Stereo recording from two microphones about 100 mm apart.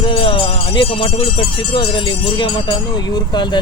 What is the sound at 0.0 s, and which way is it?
Speech, 55° left (ahead or behind).